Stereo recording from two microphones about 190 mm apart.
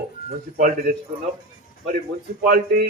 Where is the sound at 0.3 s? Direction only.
40° right (ahead or behind).